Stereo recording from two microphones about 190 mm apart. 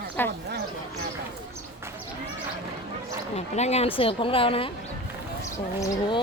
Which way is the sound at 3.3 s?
35° left (ahead or behind).